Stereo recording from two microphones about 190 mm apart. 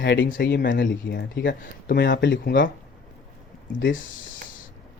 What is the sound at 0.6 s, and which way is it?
Speech, 45° left (ahead or behind).